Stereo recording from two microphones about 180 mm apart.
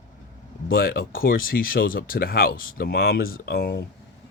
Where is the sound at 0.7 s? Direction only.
55° left (ahead or behind).